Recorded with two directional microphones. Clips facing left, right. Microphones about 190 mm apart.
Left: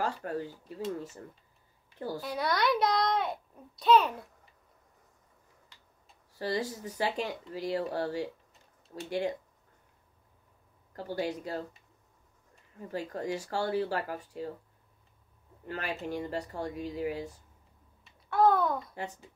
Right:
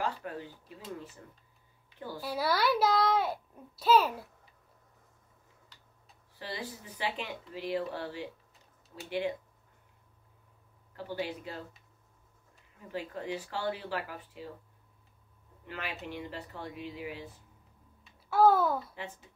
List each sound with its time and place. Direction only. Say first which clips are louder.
0.0 s speech: left 3 dB; 40° left (ahead or behind)
2.0 s speech: left 5 dB; 40° left (ahead or behind)
2.2 s a child's voice: right 1 dB; 5° right (ahead or behind)
6.3 s speech: left 8 dB; 45° left (ahead or behind)
11.1 s speech: left 4 dB; 40° left (ahead or behind)
12.8 s speech: left 3 dB; 40° left (ahead or behind)
15.6 s speech: left 4 dB; 40° left (ahead or behind)
18.0 s babbling: right 1 dB; 5° right (ahead or behind)